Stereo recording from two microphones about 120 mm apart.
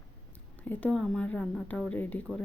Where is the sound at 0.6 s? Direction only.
10° left (ahead or behind).